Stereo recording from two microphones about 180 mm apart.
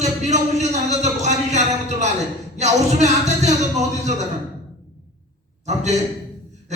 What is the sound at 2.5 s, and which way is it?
A man's voice, 40° right (ahead or behind).